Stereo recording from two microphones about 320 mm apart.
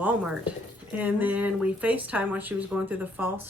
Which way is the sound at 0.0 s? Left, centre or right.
Centre.